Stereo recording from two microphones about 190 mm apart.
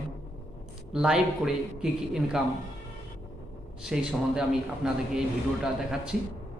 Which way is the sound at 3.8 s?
Centre (ahead or behind).